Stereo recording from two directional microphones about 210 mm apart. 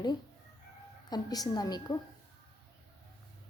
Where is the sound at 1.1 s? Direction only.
20° left (ahead or behind).